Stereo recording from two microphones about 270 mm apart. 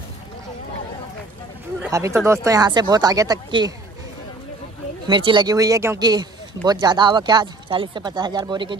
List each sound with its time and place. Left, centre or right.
1.8 s speech: centre
5.0 s speech: centre